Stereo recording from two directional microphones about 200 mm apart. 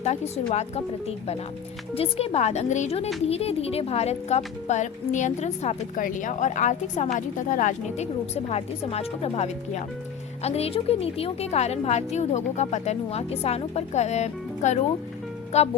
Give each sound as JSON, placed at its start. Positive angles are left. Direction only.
{"t": 0.0, "sound": "speech", "side_deg": 35}
{"t": 2.0, "sound": "speech", "side_deg": 30}